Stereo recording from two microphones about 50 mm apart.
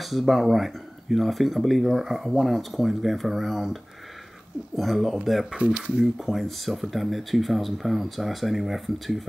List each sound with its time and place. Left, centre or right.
0.0 s speech: centre
5.6 s speech: right
6.1 s speech: centre